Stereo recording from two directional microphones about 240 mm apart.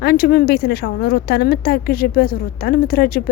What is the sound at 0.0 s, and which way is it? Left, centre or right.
Speech, left.